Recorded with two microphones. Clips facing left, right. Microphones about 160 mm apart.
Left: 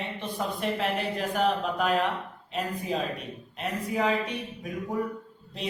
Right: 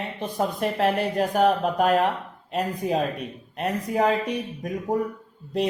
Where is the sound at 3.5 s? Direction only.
45° right (ahead or behind).